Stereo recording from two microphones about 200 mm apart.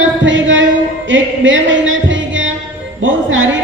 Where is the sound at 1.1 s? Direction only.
70° right (ahead or behind).